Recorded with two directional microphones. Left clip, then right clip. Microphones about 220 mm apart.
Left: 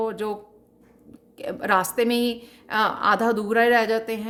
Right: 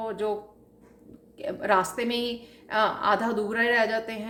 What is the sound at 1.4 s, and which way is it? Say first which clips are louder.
A woman's voice: left 2 dB; 50° left (ahead or behind).